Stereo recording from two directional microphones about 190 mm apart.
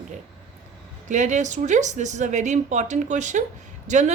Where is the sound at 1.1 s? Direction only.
40° right (ahead or behind).